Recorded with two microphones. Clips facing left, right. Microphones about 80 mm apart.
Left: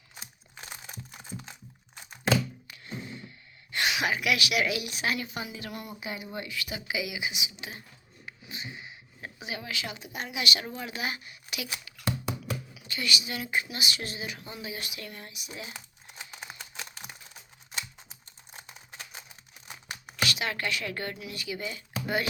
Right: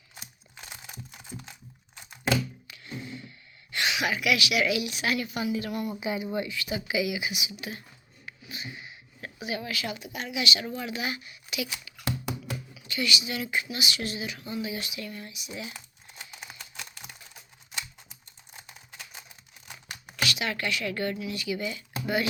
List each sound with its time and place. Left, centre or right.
3.7 s speech: left
5.0 s a woman's voice: left
6.0 s speech: centre
8.4 s a sound: left
10.1 s speech: left
15.4 s speech: left
15.7 s crumpling: centre
18.5 s a sound: left
20.2 s a woman's voice: left